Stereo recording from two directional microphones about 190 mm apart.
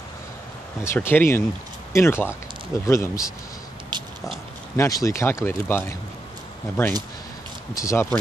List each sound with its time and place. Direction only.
0.8 s speech: 10° left (ahead or behind)
3.9 s oink: 25° right (ahead or behind)
4.7 s speech: 15° left (ahead or behind)
7.7 s speech: 15° left (ahead or behind)